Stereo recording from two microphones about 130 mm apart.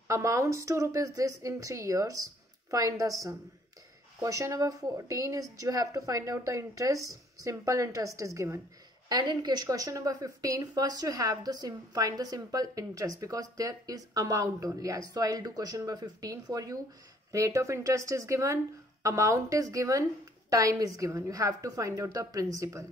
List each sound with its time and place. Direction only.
0.1 s a woman's voice: 20° right (ahead or behind)
9.1 s a woman's voice: 35° right (ahead or behind)